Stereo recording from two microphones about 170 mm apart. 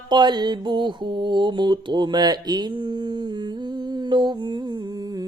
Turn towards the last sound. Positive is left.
turn(degrees=-25)  # may be behind; listen again after turning